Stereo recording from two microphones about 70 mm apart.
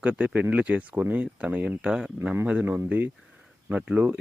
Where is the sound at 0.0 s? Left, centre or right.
Centre.